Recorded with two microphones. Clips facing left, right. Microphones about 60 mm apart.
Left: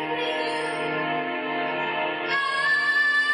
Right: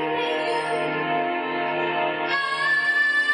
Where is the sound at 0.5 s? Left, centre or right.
Centre.